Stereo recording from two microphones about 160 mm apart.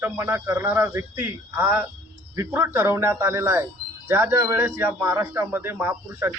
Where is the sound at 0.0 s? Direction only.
15° right (ahead or behind).